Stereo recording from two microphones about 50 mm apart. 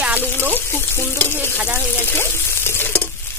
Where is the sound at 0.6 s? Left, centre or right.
Left.